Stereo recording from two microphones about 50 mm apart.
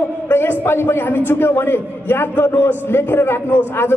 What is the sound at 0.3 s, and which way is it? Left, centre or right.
A man's voice, left.